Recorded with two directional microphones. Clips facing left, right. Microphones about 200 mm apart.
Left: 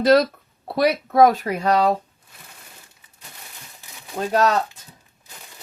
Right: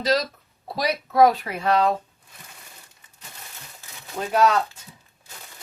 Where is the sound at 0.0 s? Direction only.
55° left (ahead or behind); by 2.0 s 35° left (ahead or behind).